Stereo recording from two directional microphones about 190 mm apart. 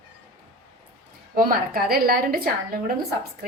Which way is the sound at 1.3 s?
50° right (ahead or behind).